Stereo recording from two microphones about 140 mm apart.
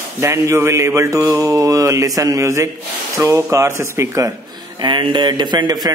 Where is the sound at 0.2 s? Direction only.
20° right (ahead or behind).